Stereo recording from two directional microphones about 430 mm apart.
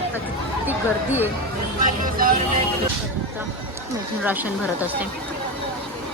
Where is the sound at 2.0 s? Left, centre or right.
Centre.